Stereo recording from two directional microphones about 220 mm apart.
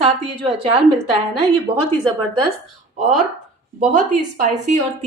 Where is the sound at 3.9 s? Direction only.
35° right (ahead or behind).